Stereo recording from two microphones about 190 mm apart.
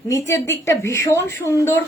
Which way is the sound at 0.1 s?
15° left (ahead or behind).